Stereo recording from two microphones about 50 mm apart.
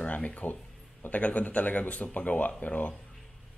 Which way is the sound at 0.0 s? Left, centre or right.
Left.